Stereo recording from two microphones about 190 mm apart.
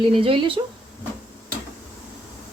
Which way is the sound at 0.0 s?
30° right (ahead or behind).